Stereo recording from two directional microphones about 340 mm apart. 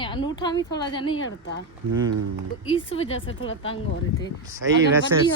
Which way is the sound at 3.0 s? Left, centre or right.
Left.